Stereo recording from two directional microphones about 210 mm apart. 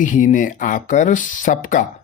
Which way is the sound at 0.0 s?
40° left (ahead or behind).